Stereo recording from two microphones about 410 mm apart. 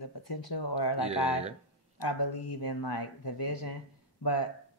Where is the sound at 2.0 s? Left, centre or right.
Left.